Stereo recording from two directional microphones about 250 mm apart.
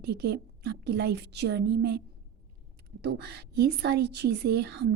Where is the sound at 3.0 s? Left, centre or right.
Right.